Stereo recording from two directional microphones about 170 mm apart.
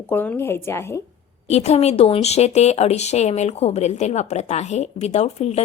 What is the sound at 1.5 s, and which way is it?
Speech, 40° left (ahead or behind).